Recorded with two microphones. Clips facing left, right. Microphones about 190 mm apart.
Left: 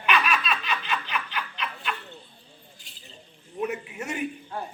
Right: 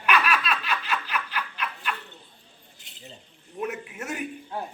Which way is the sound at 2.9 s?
20° right (ahead or behind).